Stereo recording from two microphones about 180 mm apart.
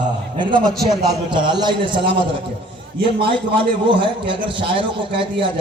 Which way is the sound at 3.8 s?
30° right (ahead or behind).